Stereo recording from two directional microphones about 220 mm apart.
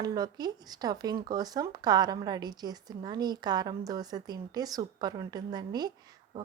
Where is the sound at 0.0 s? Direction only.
20° right (ahead or behind).